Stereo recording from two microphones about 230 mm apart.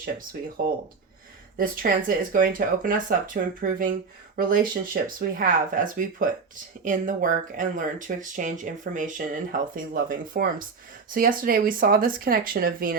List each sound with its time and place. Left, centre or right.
0.0 s speech: right